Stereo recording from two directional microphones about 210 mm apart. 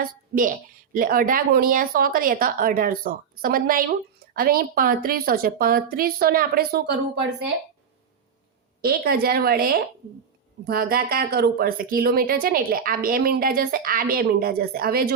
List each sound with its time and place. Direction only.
0.0 s a woman's voice: 40° right (ahead or behind)
8.8 s a woman's voice: 45° right (ahead or behind)